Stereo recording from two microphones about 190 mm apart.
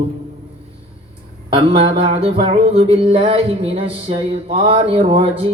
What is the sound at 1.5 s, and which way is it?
Speech, 25° right (ahead or behind).